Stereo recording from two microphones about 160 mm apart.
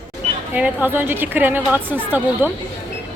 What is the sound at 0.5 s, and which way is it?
A woman's voice, 10° right (ahead or behind).